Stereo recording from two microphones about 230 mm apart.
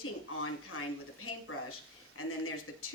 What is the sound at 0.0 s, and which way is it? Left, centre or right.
A woman's voice, left.